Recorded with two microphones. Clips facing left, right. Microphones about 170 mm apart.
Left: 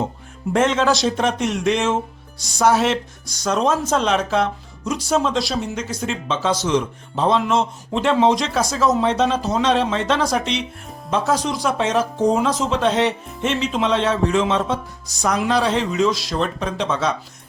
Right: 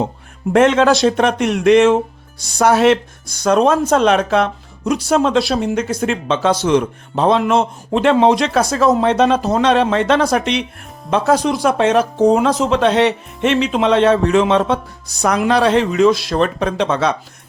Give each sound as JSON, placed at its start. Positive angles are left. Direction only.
{"t": 0.5, "sound": "speech", "side_deg": -60}